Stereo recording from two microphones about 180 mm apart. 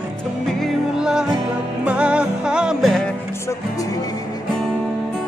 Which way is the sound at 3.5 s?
20° left (ahead or behind).